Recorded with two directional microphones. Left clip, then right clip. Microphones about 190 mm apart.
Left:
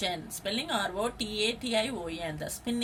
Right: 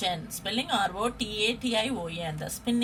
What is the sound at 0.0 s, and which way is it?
Speech, 30° left (ahead or behind).